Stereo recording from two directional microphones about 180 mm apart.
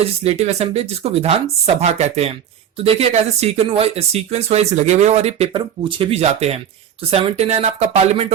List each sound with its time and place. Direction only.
0.0 s speech: 35° right (ahead or behind)